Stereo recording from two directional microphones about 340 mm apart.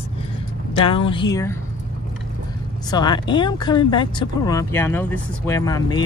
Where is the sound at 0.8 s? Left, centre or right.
Centre.